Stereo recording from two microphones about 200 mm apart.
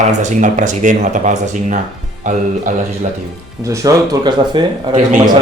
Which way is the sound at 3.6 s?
15° right (ahead or behind).